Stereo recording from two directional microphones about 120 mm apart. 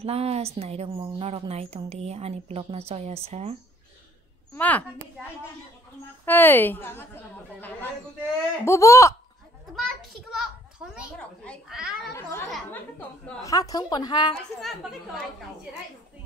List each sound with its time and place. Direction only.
0.0 s a woman's voice: 60° right (ahead or behind)
4.6 s a woman's voice: 15° left (ahead or behind)
6.2 s a woman's voice: 15° left (ahead or behind)
9.8 s a child's voice: centre (ahead or behind)
11.1 s a woman's voice: 10° left (ahead or behind)
11.7 s a woman's voice: centre (ahead or behind)
12.1 s a woman's voice: 20° left (ahead or behind); by 14.3 s 35° left (ahead or behind)
14.6 s a woman's voice: centre (ahead or behind)